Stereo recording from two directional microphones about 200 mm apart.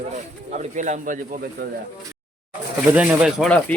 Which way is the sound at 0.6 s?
35° right (ahead or behind).